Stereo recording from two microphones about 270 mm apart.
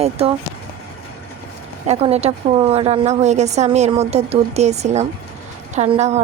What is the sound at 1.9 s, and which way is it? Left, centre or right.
A woman's voice, right.